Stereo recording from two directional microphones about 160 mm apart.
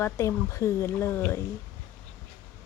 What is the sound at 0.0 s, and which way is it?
Speech, 20° left (ahead or behind).